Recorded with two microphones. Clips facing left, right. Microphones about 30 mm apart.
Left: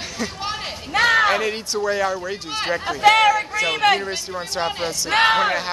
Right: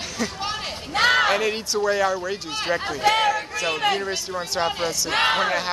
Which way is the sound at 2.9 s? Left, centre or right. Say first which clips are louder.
Left 7 dB; left.